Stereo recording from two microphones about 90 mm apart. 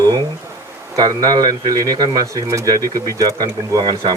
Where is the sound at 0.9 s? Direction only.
45° right (ahead or behind).